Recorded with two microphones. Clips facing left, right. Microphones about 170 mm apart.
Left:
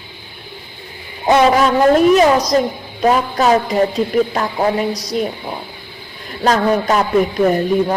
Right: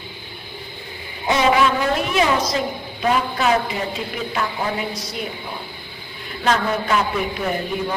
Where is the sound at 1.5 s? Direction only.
45° left (ahead or behind).